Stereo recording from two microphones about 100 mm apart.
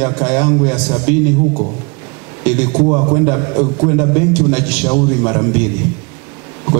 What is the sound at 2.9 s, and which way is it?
A man's voice, 25° right (ahead or behind).